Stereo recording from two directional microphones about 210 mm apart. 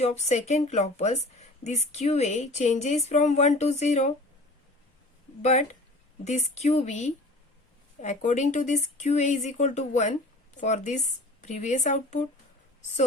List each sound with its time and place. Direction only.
0.0 s speech: 30° left (ahead or behind)
5.4 s speech: 30° left (ahead or behind)